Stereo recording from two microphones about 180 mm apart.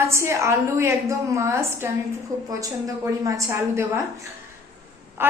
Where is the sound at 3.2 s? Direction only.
15° right (ahead or behind).